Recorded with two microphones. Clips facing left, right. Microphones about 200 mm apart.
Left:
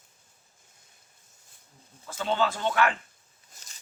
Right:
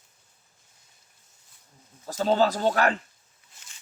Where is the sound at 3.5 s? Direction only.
40° left (ahead or behind).